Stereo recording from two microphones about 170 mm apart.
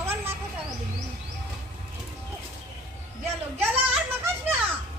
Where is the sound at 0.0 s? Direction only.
15° right (ahead or behind).